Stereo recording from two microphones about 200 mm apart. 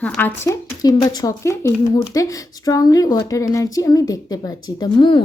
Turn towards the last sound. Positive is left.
turn(degrees=20)  # may be behind; listen again after turning